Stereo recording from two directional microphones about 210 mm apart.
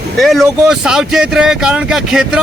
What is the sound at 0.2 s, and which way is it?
Speech, centre (ahead or behind).